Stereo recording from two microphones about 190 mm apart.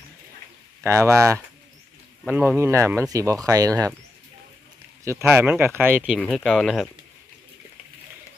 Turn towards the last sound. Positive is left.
turn(degrees=0)  # may be behind; listen again after turning